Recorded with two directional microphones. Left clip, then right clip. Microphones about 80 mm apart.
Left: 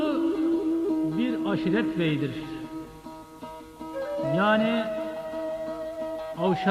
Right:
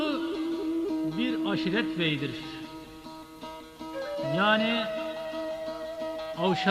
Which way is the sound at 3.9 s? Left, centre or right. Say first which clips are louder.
Left 3 dB; right.